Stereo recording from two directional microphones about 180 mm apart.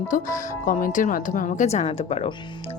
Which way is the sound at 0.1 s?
45° left (ahead or behind).